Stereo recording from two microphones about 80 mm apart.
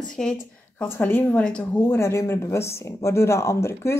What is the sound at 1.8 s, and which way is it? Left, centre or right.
Speech, left.